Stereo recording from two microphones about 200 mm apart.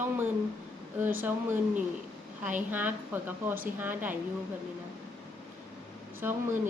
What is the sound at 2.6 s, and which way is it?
A woman's voice, 10° right (ahead or behind).